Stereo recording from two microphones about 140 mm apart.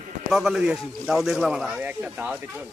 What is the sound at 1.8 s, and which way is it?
Speech, 10° right (ahead or behind).